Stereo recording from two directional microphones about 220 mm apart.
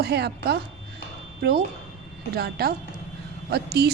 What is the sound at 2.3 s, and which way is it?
A woman's voice, 45° right (ahead or behind).